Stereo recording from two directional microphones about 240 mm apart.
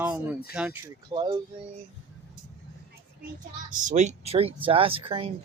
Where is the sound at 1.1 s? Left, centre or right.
Centre.